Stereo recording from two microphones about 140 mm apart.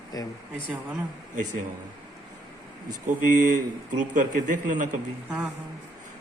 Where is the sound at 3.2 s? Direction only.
70° right (ahead or behind).